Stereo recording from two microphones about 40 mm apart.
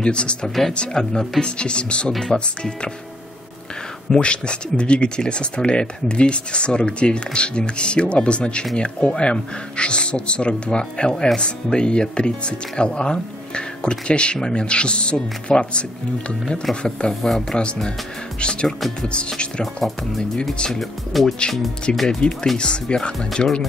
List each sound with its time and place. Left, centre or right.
0.0 s speech: left
4.1 s speech: left
16.8 s speech: left
19.6 s speech: centre
21.9 s speech: left